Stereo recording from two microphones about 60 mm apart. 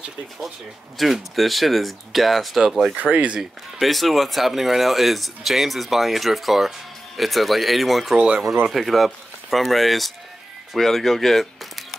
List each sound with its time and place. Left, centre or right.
0.9 s speech: centre
3.0 s speech: right
3.8 s speech: centre